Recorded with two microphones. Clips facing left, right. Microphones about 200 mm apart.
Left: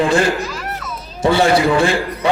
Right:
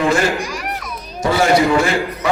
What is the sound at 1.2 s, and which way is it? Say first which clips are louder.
Speech: left 1 dB; 30° left (ahead or behind).